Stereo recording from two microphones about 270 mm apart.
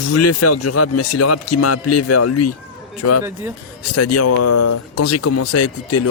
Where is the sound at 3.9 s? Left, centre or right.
Left.